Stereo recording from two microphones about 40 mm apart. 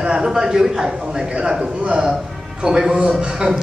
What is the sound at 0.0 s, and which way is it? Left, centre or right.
A man's voice, centre.